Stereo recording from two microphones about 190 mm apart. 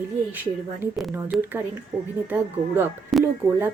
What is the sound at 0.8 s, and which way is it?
Speech, 15° left (ahead or behind).